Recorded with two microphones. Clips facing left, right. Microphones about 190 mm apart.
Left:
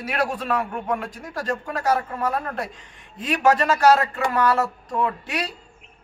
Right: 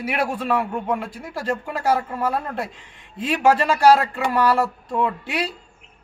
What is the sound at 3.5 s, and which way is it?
Speech, 30° right (ahead or behind).